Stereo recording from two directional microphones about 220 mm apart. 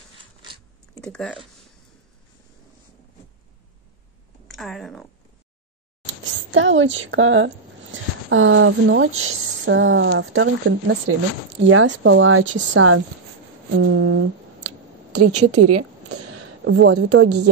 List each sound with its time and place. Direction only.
0.2 s a sound: 20° right (ahead or behind)
1.0 s speech: 5° left (ahead or behind)
4.5 s speech: centre (ahead or behind)
6.5 s speech: 60° right (ahead or behind)
15.1 s a sound: 90° right
16.7 s speech: 80° right